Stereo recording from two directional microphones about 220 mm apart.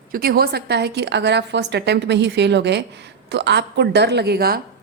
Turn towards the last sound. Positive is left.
turn(degrees=-45)  # may be behind; listen again after turning